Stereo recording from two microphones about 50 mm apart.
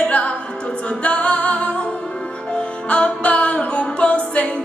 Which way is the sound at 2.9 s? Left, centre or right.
Left.